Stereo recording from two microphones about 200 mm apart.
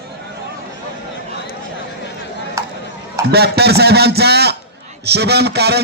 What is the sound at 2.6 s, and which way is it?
Chop, 15° right (ahead or behind).